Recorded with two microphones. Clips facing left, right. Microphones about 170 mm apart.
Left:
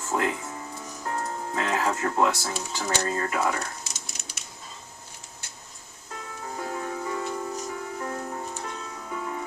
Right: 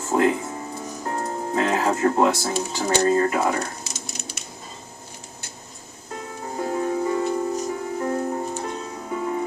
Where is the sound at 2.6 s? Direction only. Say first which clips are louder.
Right 7 dB; 35° right (ahead or behind).